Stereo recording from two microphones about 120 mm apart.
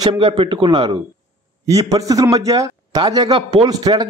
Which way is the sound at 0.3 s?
45° right (ahead or behind).